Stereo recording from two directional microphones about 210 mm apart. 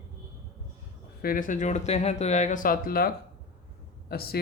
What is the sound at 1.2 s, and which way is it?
Speech, 45° left (ahead or behind).